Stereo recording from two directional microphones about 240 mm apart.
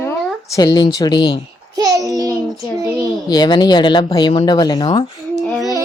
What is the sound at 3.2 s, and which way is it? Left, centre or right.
Speech, centre.